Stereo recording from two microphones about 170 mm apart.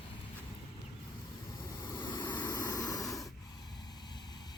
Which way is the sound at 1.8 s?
25° left (ahead or behind).